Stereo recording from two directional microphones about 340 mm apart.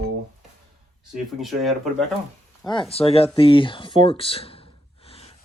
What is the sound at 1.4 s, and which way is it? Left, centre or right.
Speech, centre.